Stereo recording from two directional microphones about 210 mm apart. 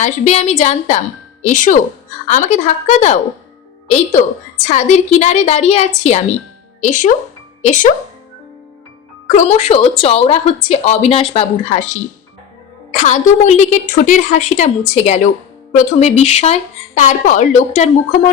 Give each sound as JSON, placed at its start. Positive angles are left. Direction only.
{"t": 0.0, "sound": "a woman's voice", "side_deg": 30}
{"t": 9.3, "sound": "a woman's voice", "side_deg": 35}
{"t": 12.9, "sound": "a woman's voice", "side_deg": 35}